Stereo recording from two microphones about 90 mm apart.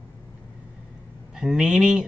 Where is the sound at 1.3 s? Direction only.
5° right (ahead or behind).